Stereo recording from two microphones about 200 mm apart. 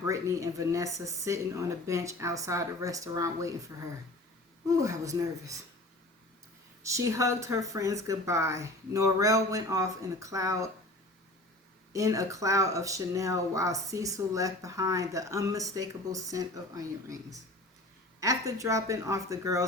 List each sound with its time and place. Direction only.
0.0 s speech: 15° right (ahead or behind)
4.7 s speech: 15° right (ahead or behind)
6.8 s speech: 15° right (ahead or behind)
11.9 s speech: 15° right (ahead or behind)
18.2 s speech: 15° right (ahead or behind)